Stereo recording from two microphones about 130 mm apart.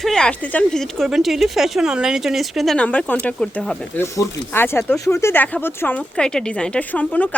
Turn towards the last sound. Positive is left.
turn(degrees=10)  # may be behind; listen again after turning